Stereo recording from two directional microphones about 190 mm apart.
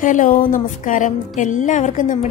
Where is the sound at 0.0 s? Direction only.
45° left (ahead or behind).